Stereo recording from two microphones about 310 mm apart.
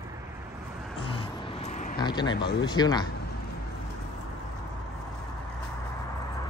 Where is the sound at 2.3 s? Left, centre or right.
Left.